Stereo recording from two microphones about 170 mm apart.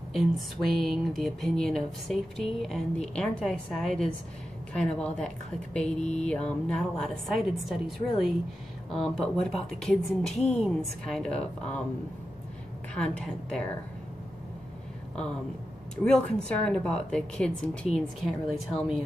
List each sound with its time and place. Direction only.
0.1 s a woman's voice: centre (ahead or behind)
5.9 s mantra: 45° left (ahead or behind)
6.2 s speech: 5° left (ahead or behind)
12.9 s speech: 5° left (ahead or behind)
16.0 s speech: 5° left (ahead or behind)